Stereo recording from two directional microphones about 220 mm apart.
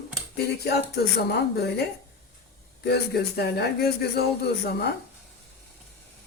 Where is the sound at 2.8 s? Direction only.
45° left (ahead or behind).